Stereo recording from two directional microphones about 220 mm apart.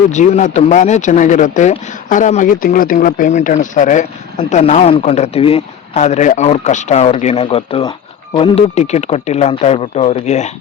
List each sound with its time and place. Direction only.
0.1 s a man's voice: 35° left (ahead or behind)